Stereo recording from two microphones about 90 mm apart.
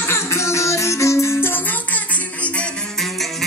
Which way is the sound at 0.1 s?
35° left (ahead or behind).